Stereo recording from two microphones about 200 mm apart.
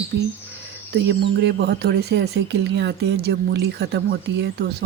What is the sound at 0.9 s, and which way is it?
Speech, 60° right (ahead or behind).